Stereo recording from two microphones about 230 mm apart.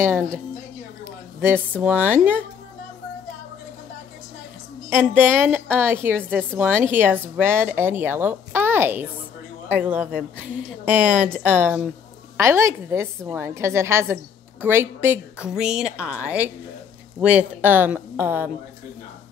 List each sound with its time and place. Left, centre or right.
1.8 s a woman's voice: centre
4.8 s a woman's voice: centre